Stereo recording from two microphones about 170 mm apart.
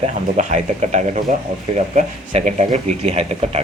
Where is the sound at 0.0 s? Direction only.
45° right (ahead or behind).